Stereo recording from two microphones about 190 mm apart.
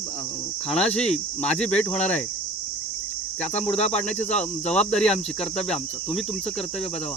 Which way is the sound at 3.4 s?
35° left (ahead or behind).